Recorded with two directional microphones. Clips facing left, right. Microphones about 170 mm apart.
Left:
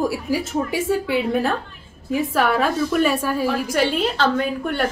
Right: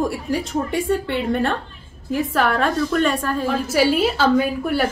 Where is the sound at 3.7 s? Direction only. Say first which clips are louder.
Right 3 dB; 5° right (ahead or behind).